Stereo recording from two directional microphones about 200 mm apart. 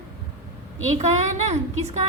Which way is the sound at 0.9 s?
35° right (ahead or behind).